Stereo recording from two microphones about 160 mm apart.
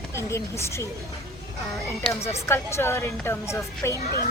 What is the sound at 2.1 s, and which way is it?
Speech, 15° left (ahead or behind).